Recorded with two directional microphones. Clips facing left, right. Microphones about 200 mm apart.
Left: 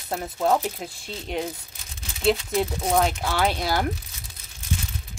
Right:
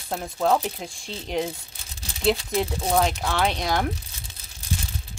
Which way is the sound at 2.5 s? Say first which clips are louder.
Even; centre (ahead or behind).